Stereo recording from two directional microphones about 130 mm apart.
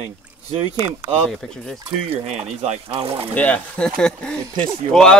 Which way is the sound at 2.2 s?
55° right (ahead or behind).